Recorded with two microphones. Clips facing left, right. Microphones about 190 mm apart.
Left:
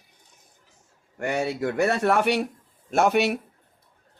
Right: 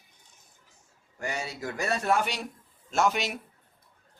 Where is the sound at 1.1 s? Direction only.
60° left (ahead or behind).